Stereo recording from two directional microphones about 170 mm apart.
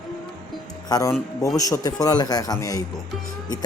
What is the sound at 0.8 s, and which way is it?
Speech, 20° left (ahead or behind).